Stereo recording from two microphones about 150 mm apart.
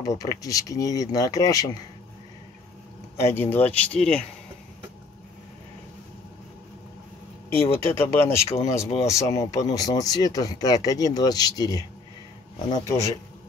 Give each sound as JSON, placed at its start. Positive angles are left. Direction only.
{"t": 0.0, "sound": "speech", "side_deg": 25}
{"t": 3.3, "sound": "speech", "side_deg": 10}
{"t": 7.4, "sound": "speech", "side_deg": 15}